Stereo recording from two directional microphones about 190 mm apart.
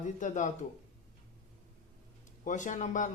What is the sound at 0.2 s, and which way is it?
Speech, 40° left (ahead or behind).